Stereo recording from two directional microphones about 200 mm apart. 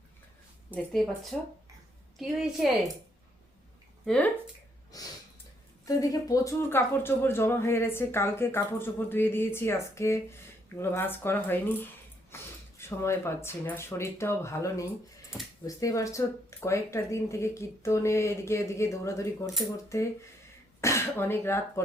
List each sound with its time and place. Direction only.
0.7 s a woman's voice: 5° left (ahead or behind)
4.0 s speech: 5° left (ahead or behind)
4.9 s snort: 20° left (ahead or behind)
5.8 s speech: 15° left (ahead or behind)
12.3 s a sound: 10° left (ahead or behind)
12.8 s speech: 15° left (ahead or behind)